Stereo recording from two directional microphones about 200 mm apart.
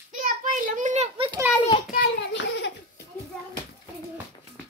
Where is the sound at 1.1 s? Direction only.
25° right (ahead or behind).